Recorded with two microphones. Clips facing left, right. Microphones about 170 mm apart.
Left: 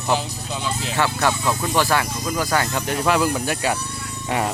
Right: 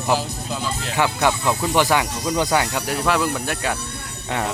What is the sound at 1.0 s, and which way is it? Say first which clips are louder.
Speech: right 2 dB; 15° right (ahead or behind).